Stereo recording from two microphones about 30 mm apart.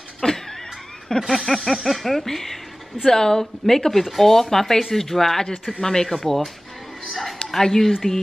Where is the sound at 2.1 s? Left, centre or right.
Centre.